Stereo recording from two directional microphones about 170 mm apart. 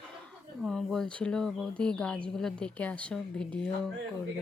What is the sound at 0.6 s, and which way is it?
A woman's voice, centre (ahead or behind).